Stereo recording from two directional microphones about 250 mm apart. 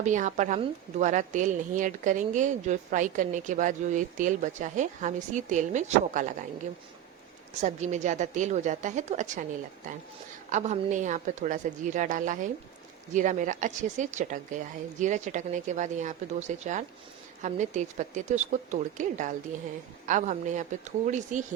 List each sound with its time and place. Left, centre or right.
0.0 s a woman's voice: right
7.6 s a woman's voice: right
10.5 s a woman's voice: right